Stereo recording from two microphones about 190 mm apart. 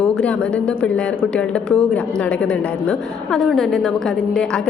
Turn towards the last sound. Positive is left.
turn(degrees=5)  # may be behind; listen again after turning